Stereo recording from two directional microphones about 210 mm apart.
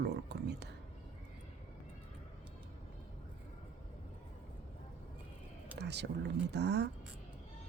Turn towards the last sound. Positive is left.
turn(degrees=-55)  # may be behind; listen again after turning